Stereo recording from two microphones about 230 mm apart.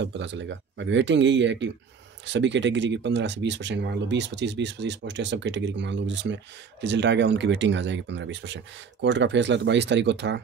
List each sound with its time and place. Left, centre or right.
0.0 s speech: right